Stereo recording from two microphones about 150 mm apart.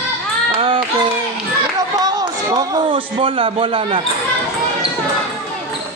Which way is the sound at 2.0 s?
30° right (ahead or behind).